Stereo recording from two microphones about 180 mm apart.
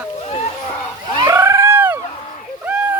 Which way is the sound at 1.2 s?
15° right (ahead or behind).